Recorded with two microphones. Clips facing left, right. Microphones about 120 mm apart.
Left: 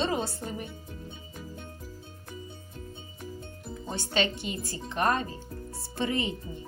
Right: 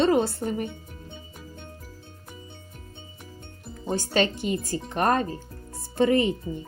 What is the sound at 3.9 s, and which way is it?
Speech, 45° right (ahead or behind).